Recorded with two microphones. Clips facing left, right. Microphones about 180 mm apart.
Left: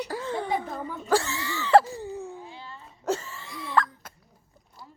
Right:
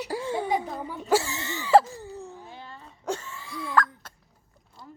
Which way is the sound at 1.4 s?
20° right (ahead or behind).